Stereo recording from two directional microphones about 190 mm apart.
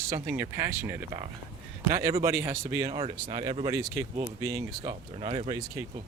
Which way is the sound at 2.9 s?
25° right (ahead or behind).